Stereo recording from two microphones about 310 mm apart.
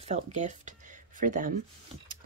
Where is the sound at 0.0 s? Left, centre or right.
Right.